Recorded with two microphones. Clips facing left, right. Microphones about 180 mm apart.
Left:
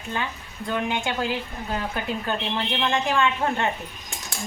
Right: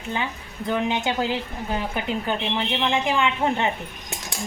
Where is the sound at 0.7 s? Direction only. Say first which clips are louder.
Right 3 dB; 20° right (ahead or behind).